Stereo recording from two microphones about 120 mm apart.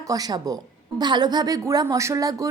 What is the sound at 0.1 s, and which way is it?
A woman's voice, 30° right (ahead or behind).